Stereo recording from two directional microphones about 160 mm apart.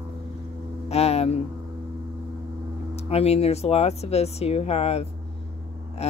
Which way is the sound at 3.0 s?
40° left (ahead or behind).